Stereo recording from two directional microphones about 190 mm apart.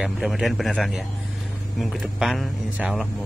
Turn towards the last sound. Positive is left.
turn(degrees=0)  # may be behind; listen again after turning